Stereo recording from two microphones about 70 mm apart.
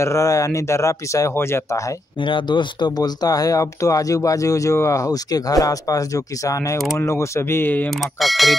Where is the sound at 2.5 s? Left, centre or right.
Left.